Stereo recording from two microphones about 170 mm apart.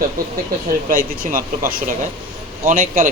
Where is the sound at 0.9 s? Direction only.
55° right (ahead or behind).